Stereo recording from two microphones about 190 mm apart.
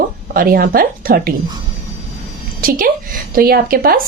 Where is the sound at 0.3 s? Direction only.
50° right (ahead or behind).